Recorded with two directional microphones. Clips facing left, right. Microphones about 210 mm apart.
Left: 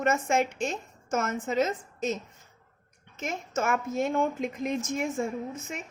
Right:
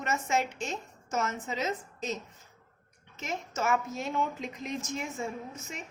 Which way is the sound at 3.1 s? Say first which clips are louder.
Left 4 dB; 50° left (ahead or behind).